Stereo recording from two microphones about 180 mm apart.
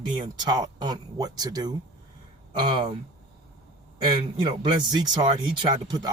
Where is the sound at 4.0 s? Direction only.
25° right (ahead or behind).